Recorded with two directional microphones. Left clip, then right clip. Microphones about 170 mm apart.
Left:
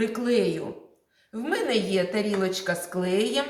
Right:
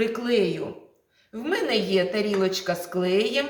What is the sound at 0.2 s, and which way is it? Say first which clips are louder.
A woman's voice: right 1 dB; 15° right (ahead or behind).